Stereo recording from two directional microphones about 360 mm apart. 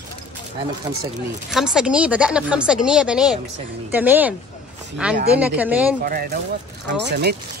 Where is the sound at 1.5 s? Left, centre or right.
Centre.